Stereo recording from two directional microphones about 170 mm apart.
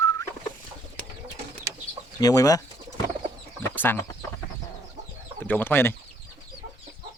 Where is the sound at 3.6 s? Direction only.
10° left (ahead or behind).